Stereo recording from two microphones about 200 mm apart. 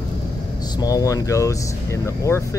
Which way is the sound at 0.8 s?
15° left (ahead or behind).